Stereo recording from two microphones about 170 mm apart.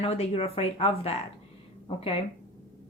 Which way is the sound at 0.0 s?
35° left (ahead or behind).